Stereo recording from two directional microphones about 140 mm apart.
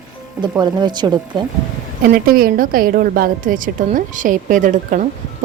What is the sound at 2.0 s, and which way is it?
A woman's voice, 90° right.